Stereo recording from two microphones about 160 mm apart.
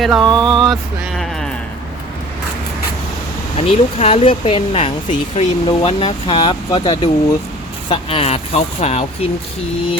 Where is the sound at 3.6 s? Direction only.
35° left (ahead or behind).